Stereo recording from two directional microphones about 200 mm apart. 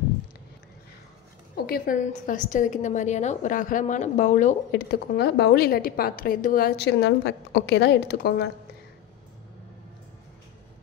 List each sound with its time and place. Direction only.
1.5 s a woman's voice: 45° left (ahead or behind)